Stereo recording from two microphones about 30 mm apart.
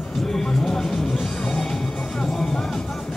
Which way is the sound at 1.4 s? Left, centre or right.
Centre.